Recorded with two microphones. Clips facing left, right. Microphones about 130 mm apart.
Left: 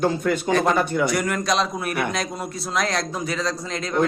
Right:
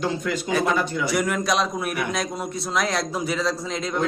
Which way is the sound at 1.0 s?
Centre (ahead or behind).